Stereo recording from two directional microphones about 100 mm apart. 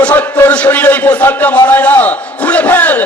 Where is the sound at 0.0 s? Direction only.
15° left (ahead or behind).